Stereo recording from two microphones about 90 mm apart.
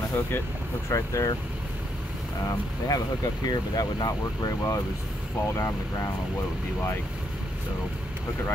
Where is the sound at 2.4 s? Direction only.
40° left (ahead or behind).